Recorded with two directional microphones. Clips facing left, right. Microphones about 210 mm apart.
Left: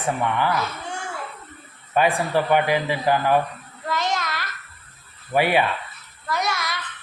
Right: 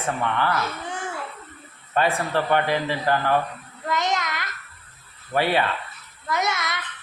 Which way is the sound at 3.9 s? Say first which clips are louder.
Even; 20° right (ahead or behind).